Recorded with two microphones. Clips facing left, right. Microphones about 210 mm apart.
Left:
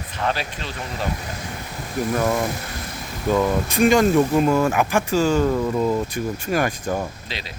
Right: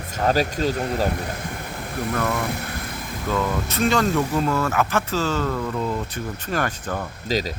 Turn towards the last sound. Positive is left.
turn(degrees=-40)  # may be behind; listen again after turning